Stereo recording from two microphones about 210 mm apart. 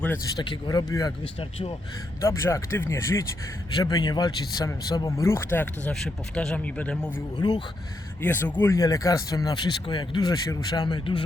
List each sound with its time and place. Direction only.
0.0 s speech: 15° left (ahead or behind)
2.2 s speech: 15° left (ahead or behind)
7.3 s speech: 20° left (ahead or behind)
8.2 s speech: 10° left (ahead or behind)